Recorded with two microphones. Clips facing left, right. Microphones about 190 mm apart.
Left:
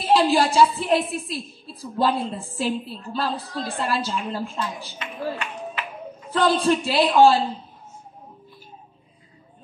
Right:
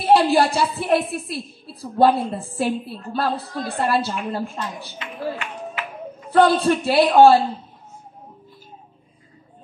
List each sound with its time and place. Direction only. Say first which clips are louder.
0.0 s a woman's voice: right 3 dB; 60° right (ahead or behind)
6.3 s a woman's voice: right 4 dB; 60° right (ahead or behind)